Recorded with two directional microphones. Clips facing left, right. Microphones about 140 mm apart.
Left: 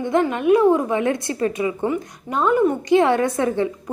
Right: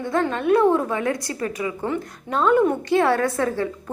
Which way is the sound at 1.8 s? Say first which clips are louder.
Left 3 dB; 10° left (ahead or behind).